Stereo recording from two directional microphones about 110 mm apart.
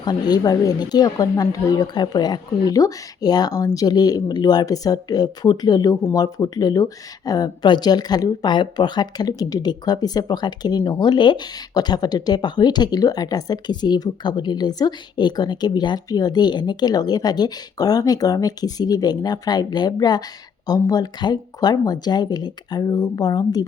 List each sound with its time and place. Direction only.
0.0 s speech: 40° left (ahead or behind)